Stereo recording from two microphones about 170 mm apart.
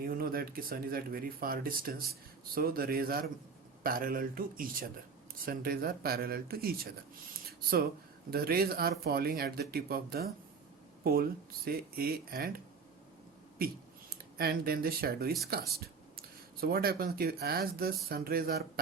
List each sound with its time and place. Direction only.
0.0 s speech: 60° right (ahead or behind)
8.3 s speech: 60° right (ahead or behind)